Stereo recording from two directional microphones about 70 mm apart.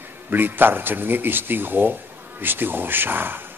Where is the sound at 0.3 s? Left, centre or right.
Right.